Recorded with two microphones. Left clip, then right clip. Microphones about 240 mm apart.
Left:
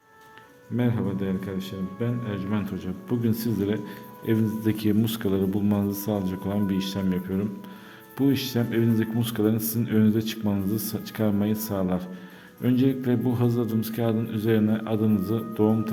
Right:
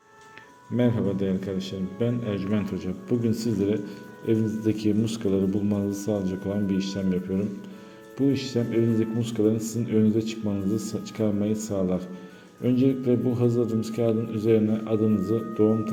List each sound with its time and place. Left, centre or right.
0.8 s a man's voice: centre; by 15.7 s left